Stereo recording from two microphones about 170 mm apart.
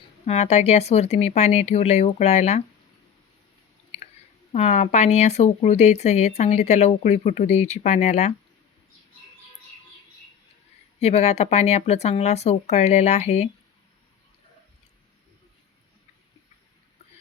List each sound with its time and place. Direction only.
0.3 s speech: 40° left (ahead or behind)
4.5 s speech: 40° left (ahead or behind)
11.0 s speech: 40° left (ahead or behind)